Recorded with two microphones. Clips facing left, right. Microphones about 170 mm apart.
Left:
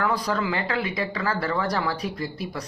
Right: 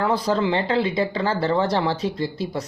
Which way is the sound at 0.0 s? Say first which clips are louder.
Right 4 dB; 25° right (ahead or behind).